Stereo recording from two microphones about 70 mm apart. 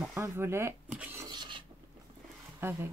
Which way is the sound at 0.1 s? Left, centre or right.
Right.